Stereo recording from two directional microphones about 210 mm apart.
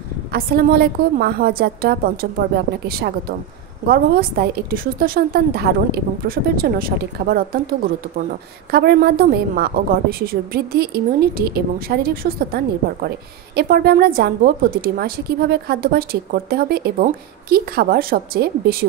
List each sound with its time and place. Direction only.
0.3 s a woman's voice: 45° right (ahead or behind)
3.8 s a woman's voice: 45° right (ahead or behind)
8.7 s a woman's voice: 45° right (ahead or behind)